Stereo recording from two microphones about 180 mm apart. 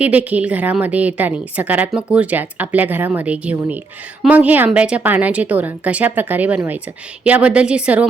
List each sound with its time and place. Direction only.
0.0 s a woman's voice: 10° right (ahead or behind)